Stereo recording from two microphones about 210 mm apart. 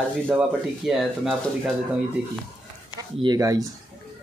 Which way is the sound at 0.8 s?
Centre (ahead or behind).